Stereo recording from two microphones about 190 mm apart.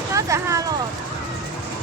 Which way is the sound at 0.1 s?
15° right (ahead or behind).